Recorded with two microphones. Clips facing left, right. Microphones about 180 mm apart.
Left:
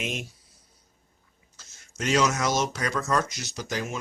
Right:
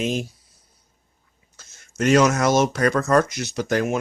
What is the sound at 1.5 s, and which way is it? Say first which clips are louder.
Speech: right 9 dB; 55° right (ahead or behind).